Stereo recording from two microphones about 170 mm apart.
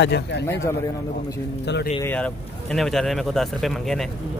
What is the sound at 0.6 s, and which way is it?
Speech, 20° left (ahead or behind).